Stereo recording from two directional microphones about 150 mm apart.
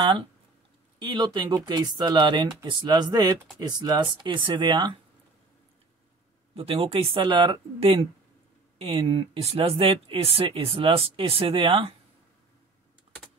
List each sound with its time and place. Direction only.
0.0 s speech: 35° right (ahead or behind)
6.5 s speech: 40° right (ahead or behind)